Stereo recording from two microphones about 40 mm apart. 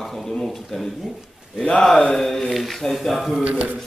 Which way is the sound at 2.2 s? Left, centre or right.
Centre.